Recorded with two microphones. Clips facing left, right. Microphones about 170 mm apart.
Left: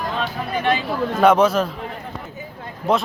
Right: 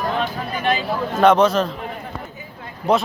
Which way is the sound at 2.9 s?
Centre (ahead or behind).